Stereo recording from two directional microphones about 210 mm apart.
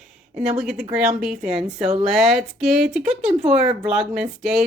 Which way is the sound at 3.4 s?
30° right (ahead or behind).